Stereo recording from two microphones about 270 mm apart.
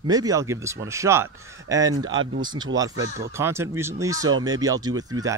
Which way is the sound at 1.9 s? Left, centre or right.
Right.